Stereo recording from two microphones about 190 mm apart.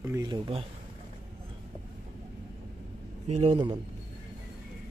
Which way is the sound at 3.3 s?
35° right (ahead or behind).